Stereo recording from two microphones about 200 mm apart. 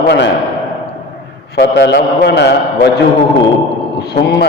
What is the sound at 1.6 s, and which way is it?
A man's voice, 55° left (ahead or behind).